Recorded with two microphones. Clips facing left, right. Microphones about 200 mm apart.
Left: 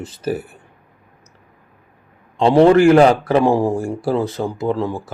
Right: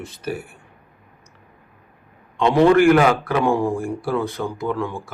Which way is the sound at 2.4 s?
30° left (ahead or behind).